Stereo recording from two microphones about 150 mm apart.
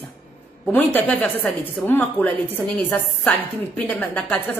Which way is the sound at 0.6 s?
10° left (ahead or behind).